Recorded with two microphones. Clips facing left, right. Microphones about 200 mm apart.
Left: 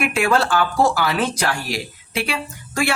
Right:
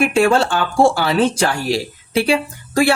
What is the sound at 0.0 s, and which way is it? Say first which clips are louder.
Speech: right 5 dB; 30° right (ahead or behind).